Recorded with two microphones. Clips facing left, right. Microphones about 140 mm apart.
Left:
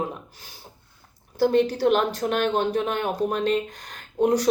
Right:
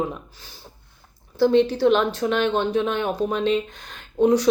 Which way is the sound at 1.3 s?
45° left (ahead or behind).